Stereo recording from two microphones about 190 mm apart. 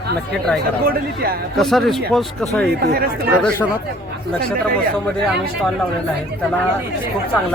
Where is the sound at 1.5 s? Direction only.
Centre (ahead or behind).